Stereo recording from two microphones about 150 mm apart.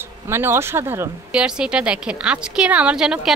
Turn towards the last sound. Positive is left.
turn(degrees=-5)  # may be behind; listen again after turning